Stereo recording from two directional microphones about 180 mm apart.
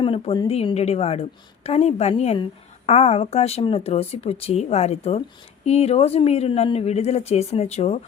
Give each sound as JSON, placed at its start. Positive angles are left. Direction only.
{"t": 0.0, "sound": "a woman's voice", "side_deg": 30}